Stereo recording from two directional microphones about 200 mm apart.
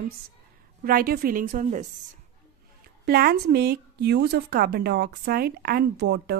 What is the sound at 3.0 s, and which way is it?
A woman's voice, 50° right (ahead or behind).